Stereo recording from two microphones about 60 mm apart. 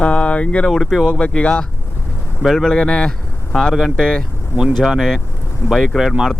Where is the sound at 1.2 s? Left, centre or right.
Centre.